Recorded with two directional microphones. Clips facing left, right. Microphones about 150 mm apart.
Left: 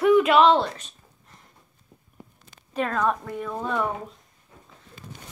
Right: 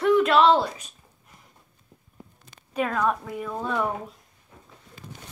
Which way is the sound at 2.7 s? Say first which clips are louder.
Even; 5° right (ahead or behind).